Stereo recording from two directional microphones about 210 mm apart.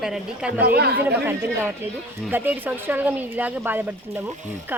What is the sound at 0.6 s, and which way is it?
Speech, 50° right (ahead or behind).